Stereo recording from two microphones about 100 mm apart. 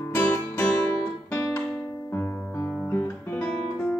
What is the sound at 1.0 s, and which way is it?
Guitar, 20° left (ahead or behind).